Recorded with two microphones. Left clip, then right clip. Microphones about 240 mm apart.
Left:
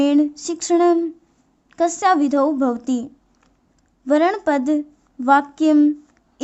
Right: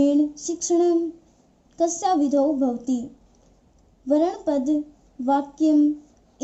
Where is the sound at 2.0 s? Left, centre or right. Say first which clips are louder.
Left 5 dB; left.